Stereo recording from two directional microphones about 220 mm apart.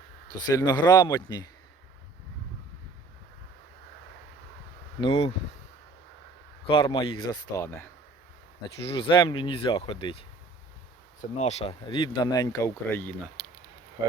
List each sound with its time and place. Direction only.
0.5 s speech: 15° left (ahead or behind)
4.9 s speech: 25° left (ahead or behind)
6.7 s speech: 20° left (ahead or behind)
8.9 s speech: 25° left (ahead or behind); by 13.4 s 5° left (ahead or behind)